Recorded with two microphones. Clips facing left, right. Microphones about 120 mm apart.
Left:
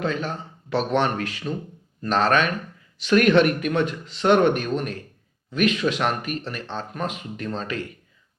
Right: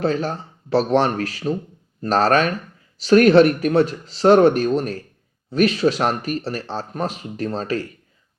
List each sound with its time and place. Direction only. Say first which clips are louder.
0.0 s speech: right 5 dB; 35° right (ahead or behind)